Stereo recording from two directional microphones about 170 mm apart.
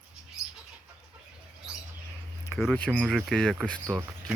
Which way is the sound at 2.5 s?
5° left (ahead or behind).